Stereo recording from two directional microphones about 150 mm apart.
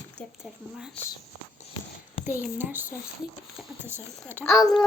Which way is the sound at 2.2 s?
10° right (ahead or behind).